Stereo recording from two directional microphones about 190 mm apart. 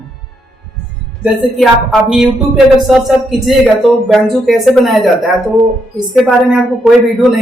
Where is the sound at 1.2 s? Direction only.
Centre (ahead or behind).